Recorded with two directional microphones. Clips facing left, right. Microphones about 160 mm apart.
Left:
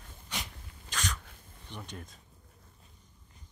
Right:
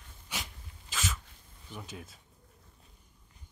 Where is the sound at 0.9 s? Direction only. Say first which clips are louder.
Even; 5° right (ahead or behind).